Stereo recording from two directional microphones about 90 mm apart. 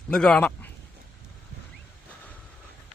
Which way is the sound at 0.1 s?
10° left (ahead or behind).